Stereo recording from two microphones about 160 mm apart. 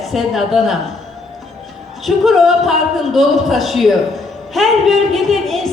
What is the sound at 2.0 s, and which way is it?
A woman's voice, centre (ahead or behind).